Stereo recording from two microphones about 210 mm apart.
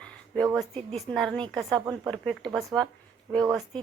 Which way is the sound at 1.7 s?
15° right (ahead or behind).